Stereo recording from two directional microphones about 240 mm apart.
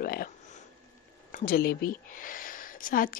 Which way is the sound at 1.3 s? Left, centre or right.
Left.